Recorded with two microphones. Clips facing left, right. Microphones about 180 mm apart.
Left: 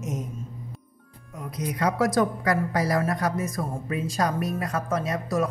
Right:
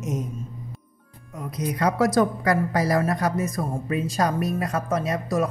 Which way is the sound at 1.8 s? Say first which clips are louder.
Right 2 dB; 30° right (ahead or behind).